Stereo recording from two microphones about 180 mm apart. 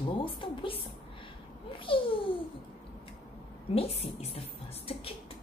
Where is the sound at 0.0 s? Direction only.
30° left (ahead or behind).